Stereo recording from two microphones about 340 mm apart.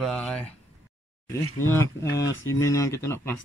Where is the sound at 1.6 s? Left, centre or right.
Centre.